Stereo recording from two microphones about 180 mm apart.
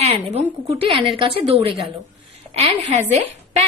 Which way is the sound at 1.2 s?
30° right (ahead or behind).